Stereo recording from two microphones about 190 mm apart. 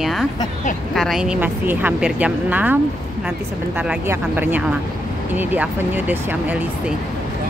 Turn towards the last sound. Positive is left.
turn(degrees=-10)  # may be behind; listen again after turning